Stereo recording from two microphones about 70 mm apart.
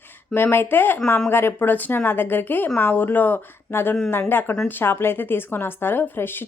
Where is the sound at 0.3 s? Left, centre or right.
Left.